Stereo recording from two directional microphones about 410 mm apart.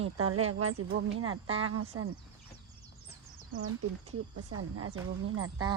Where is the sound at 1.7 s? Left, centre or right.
Right.